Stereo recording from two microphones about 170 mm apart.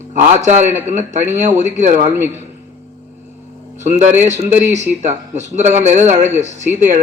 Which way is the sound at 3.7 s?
45° right (ahead or behind).